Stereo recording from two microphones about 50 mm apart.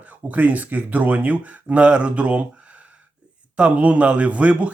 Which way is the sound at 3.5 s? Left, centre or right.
Right.